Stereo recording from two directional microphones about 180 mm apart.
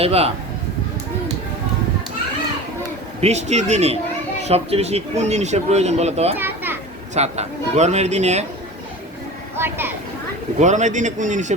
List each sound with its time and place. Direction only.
0.0 s speech: 35° right (ahead or behind)
3.2 s speech: 35° right (ahead or behind)
6.3 s children playing: 10° right (ahead or behind)
7.1 s speech: 40° right (ahead or behind)
9.6 s speech: 10° right (ahead or behind)
10.6 s a man's voice: 40° right (ahead or behind)